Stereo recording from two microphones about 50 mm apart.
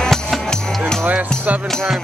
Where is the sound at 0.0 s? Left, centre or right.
Centre.